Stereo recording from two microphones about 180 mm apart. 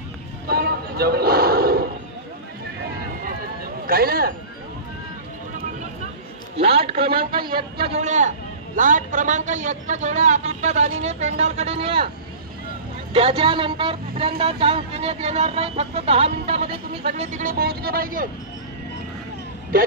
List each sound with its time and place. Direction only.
0.5 s a sound: 60° right (ahead or behind)
3.3 s a sound: 55° right (ahead or behind)
6.5 s a man's voice: 30° right (ahead or behind)
7.0 s speech: 55° right (ahead or behind)
7.8 s a man's voice: 40° right (ahead or behind)
13.1 s a man's voice: 30° right (ahead or behind)
17.2 s speech: 45° right (ahead or behind)